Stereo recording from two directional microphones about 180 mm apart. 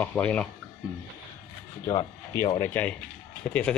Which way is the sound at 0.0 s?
5° left (ahead or behind).